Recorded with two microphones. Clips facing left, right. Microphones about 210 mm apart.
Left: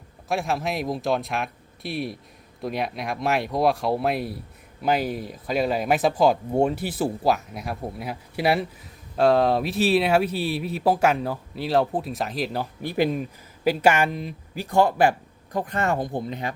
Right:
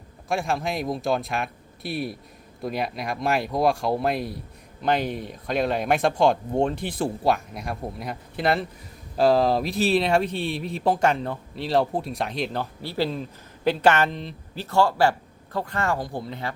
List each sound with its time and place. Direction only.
0.3 s speech: centre (ahead or behind)
12.8 s speech: 15° left (ahead or behind)